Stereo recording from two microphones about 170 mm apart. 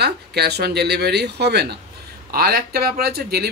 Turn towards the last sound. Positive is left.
turn(degrees=-65)  # may be behind; listen again after turning